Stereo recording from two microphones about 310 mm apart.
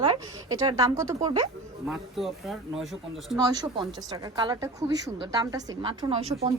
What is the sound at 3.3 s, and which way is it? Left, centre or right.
A woman's voice, centre.